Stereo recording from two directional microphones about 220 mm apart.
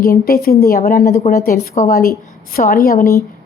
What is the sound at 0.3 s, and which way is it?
A woman's voice, 40° left (ahead or behind).